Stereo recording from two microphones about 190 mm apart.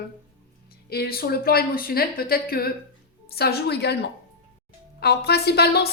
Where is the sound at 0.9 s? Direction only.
55° left (ahead or behind).